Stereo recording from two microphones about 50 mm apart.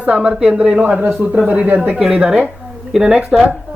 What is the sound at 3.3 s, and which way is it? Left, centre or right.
Speech, centre.